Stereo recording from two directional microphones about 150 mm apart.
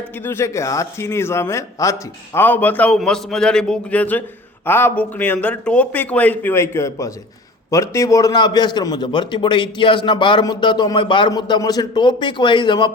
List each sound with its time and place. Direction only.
0.3 s a man's voice: 15° left (ahead or behind)